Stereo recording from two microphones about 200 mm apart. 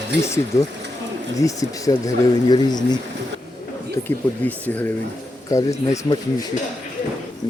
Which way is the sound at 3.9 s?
10° left (ahead or behind).